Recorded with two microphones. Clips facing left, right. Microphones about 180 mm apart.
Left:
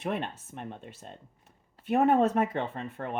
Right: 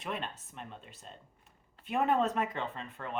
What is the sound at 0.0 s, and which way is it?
Speech, 55° left (ahead or behind).